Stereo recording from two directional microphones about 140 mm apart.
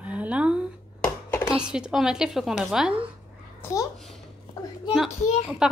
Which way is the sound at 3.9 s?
Centre (ahead or behind).